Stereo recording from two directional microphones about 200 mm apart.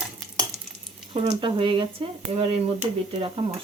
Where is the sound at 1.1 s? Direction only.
25° right (ahead or behind).